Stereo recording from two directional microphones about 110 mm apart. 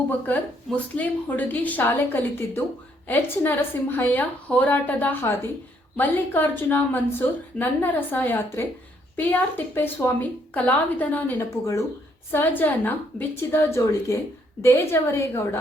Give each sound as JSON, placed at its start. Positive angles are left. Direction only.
{"t": 0.3, "sound": "a woman's voice", "side_deg": 15}
{"t": 11.6, "sound": "a woman's voice", "side_deg": 30}
{"t": 12.3, "sound": "a woman's voice", "side_deg": 15}